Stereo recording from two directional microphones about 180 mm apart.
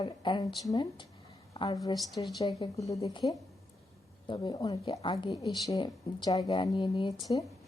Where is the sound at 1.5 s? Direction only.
25° left (ahead or behind).